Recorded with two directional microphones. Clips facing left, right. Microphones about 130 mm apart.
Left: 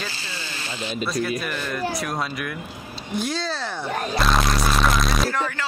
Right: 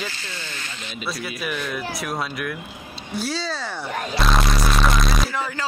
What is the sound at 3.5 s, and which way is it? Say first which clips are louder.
Speech: left 1 dB; 10° right (ahead or behind).